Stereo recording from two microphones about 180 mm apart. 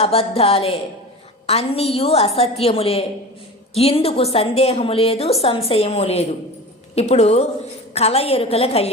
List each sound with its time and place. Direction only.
0.0 s a woman's voice: 35° left (ahead or behind)